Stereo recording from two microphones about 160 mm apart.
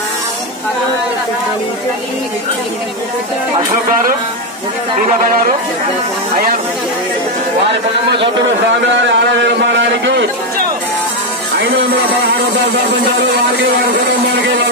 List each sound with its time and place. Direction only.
9.0 s a man's voice: 90° right